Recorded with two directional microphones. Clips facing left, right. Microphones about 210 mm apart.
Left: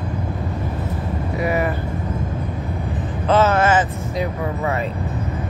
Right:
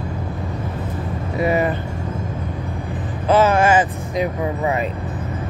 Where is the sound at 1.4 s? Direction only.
25° right (ahead or behind).